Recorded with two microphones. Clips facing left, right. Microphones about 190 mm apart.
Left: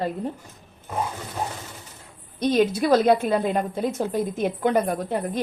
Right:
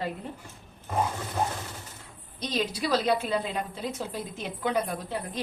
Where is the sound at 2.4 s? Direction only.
55° left (ahead or behind).